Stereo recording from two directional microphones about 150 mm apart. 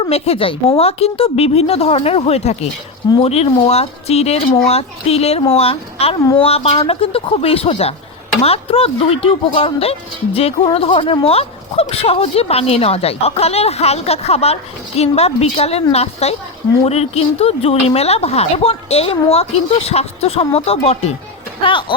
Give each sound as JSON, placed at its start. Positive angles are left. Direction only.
{"t": 0.0, "sound": "speech", "side_deg": 40}
{"t": 21.6, "sound": "speech", "side_deg": 35}